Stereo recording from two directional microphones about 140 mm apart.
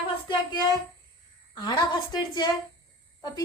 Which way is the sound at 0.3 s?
30° left (ahead or behind).